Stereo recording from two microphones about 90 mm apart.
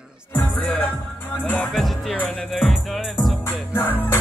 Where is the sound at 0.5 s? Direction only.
15° left (ahead or behind).